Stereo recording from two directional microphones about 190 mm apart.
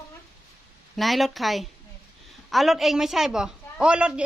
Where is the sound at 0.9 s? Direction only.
Centre (ahead or behind).